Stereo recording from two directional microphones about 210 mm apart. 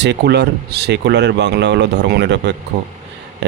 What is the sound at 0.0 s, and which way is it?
Speech, 55° right (ahead or behind).